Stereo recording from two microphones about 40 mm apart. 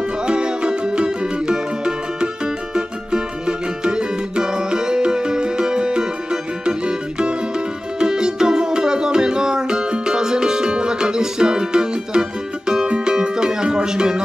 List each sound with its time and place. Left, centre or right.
0.3 s music: right